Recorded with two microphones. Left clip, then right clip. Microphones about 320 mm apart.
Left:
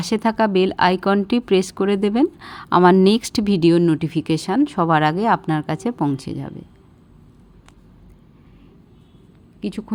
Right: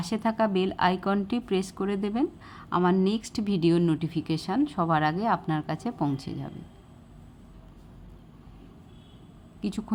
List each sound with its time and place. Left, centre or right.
0.0 s speech: left
9.6 s speech: centre